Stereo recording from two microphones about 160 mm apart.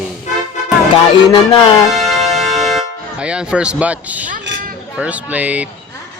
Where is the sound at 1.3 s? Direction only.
35° left (ahead or behind).